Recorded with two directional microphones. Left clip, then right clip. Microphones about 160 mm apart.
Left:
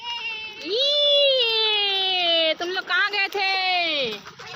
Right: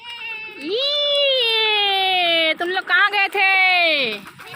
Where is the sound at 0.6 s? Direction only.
45° right (ahead or behind).